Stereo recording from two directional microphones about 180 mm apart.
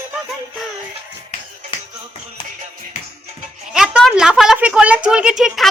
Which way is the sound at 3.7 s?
5° right (ahead or behind).